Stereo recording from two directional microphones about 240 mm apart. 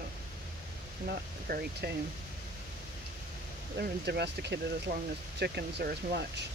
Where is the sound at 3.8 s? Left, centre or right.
Right.